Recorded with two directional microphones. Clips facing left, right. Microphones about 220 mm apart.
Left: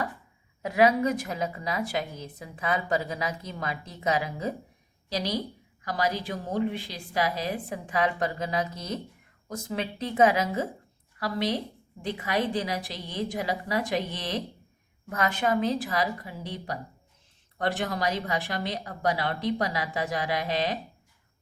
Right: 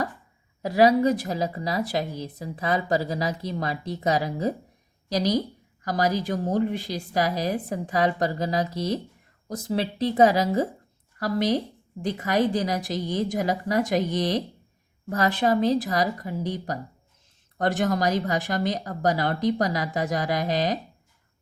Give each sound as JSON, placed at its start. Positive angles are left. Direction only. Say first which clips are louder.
{"t": 0.6, "sound": "a woman's voice", "louder": "right 4 dB", "side_deg": -35}